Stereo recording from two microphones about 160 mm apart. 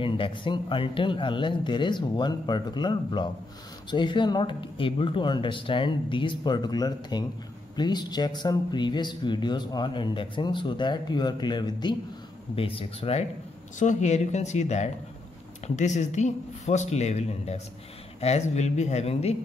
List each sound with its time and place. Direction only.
0.0 s speech: 30° left (ahead or behind)
13.7 s speech: 50° left (ahead or behind)